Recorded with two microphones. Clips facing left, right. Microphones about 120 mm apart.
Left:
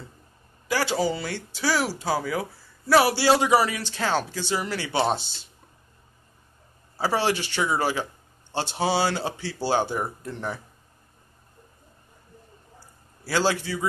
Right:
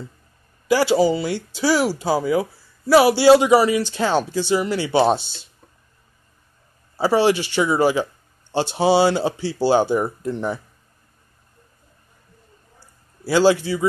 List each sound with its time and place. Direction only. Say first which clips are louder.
0.7 s speech: right 8 dB; 10° right (ahead or behind)
7.0 s speech: right 7 dB; 20° right (ahead or behind)